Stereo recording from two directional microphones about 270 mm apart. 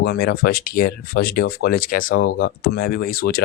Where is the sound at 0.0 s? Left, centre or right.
Left.